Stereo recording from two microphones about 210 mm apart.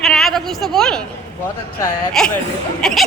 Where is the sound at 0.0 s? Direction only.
Centre (ahead or behind).